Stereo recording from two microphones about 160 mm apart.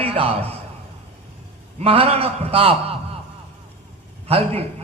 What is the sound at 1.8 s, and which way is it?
A man's voice, 35° right (ahead or behind).